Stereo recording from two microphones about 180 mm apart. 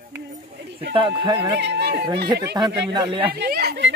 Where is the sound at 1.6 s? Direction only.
70° right (ahead or behind).